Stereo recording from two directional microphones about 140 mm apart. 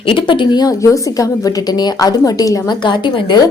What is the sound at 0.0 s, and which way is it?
A woman's voice, 35° left (ahead or behind).